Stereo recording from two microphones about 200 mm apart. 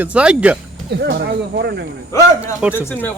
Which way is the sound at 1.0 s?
55° right (ahead or behind).